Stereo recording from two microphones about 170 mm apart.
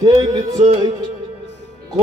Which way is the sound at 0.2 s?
30° right (ahead or behind).